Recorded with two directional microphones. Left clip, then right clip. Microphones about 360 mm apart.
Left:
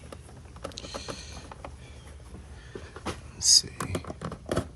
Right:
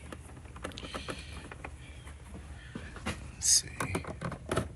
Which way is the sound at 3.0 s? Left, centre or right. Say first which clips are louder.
Left 5 dB; centre.